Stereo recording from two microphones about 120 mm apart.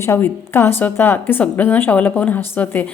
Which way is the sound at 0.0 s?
20° left (ahead or behind).